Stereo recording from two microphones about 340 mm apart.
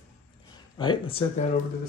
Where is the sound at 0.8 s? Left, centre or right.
Centre.